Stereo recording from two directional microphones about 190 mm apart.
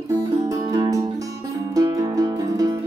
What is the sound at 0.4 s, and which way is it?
Music, 20° right (ahead or behind).